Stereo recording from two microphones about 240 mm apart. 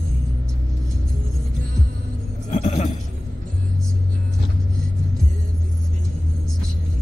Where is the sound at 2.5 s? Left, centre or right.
Left.